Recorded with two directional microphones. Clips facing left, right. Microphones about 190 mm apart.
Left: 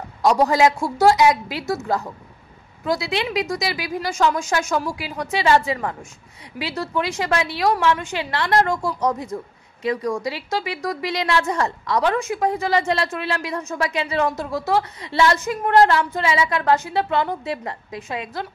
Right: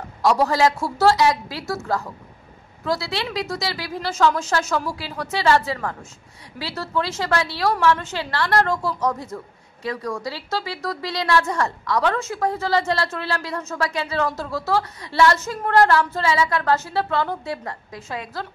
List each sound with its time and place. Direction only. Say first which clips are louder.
0.2 s a woman's voice: left 2 dB; 20° left (ahead or behind)